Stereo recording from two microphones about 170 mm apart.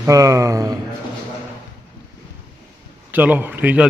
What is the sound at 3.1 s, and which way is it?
Speech, 10° right (ahead or behind).